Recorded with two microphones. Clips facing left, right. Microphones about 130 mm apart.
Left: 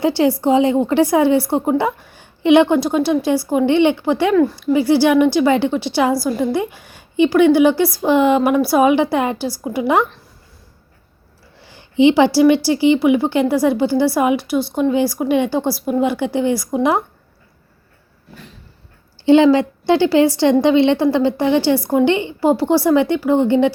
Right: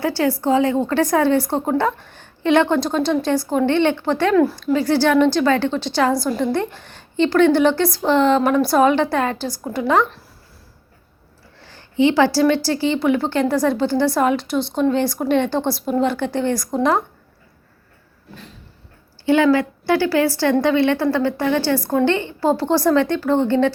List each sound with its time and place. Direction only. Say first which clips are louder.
0.0 s a woman's voice: left 4 dB; 20° left (ahead or behind)
4.4 s speech: left 1 dB; centre (ahead or behind)
4.6 s a woman's voice: left 3 dB; 10° left (ahead or behind)
11.6 s a sound: left 4 dB; 15° left (ahead or behind)
12.6 s a woman's voice: left 5 dB; 15° left (ahead or behind)
19.2 s a woman's voice: left 4 dB; 25° left (ahead or behind)